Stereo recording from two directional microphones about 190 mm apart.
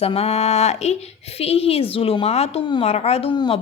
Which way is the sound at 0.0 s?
35° left (ahead or behind).